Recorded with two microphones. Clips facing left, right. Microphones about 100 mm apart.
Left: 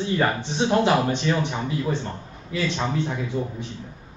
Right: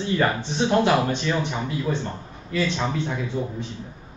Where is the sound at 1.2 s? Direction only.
5° left (ahead or behind).